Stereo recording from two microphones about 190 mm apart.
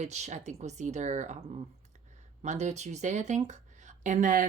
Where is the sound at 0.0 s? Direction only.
35° right (ahead or behind).